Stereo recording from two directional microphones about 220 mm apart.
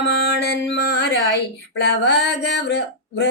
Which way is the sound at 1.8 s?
50° left (ahead or behind).